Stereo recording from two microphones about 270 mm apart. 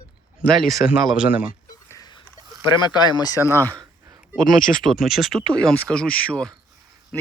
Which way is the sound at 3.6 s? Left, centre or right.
Centre.